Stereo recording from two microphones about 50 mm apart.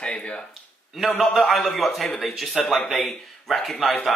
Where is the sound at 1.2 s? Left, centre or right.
Centre.